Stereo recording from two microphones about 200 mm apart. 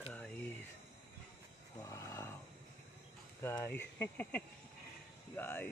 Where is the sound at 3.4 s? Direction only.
10° left (ahead or behind).